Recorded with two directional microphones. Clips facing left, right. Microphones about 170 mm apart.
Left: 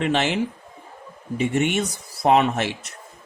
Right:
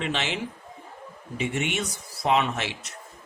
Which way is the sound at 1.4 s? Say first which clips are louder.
Left 6 dB; 45° left (ahead or behind).